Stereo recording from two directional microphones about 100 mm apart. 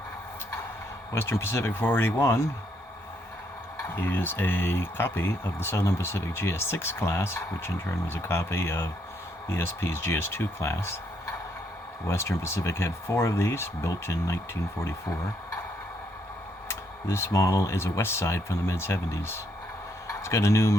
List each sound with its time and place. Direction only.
1.1 s speech: 25° left (ahead or behind)
3.8 s speech: 20° left (ahead or behind)
16.6 s speech: 25° left (ahead or behind)